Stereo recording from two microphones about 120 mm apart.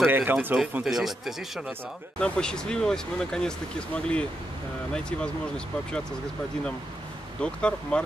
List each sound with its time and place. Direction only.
0.0 s speech: 15° right (ahead or behind)
0.8 s speech: centre (ahead or behind)
2.1 s speech: 10° left (ahead or behind)
7.4 s speech: 10° left (ahead or behind)